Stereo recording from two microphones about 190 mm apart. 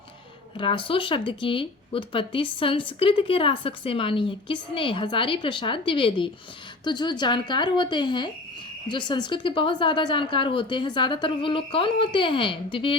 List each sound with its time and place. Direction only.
0.5 s speech: 25° left (ahead or behind)